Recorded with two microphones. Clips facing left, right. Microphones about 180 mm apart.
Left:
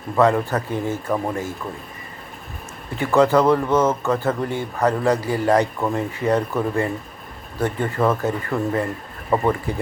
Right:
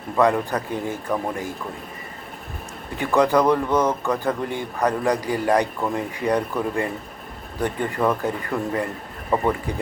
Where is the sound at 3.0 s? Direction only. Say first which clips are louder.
Left 2 dB; 15° right (ahead or behind).